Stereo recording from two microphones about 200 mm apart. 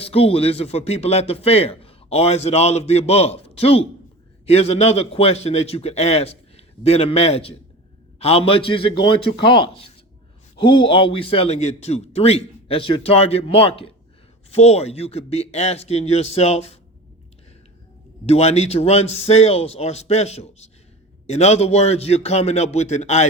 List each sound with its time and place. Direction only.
0.0 s a man's voice: 30° left (ahead or behind)
18.3 s speech: 30° left (ahead or behind)